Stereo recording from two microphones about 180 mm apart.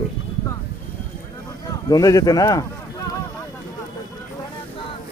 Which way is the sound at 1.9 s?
20° left (ahead or behind).